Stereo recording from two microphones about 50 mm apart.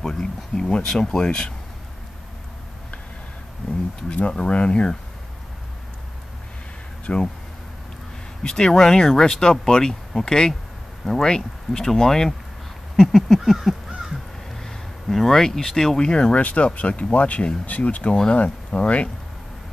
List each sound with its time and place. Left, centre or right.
0.0 s speech: centre
4.1 s speech: left
7.1 s speech: left
8.4 s speech: centre
12.9 s a sound: centre
13.6 s crow: centre
14.6 s speech: centre; by 18.1 s left
18.1 s speech: centre